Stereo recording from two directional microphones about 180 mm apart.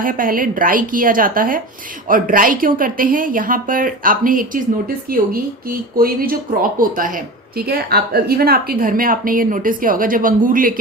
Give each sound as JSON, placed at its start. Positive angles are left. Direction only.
{"t": 0.0, "sound": "speech", "side_deg": -50}